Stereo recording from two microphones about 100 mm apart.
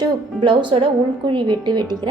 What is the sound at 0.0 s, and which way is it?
A woman's voice, 55° right (ahead or behind).